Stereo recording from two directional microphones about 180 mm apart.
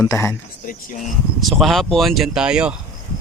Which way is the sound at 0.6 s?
50° left (ahead or behind).